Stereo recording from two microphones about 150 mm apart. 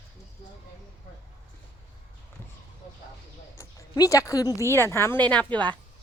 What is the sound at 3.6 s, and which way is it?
Speech, 20° left (ahead or behind).